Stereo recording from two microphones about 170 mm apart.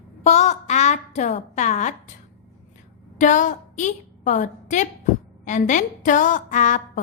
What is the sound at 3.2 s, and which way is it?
A woman's voice, 50° left (ahead or behind).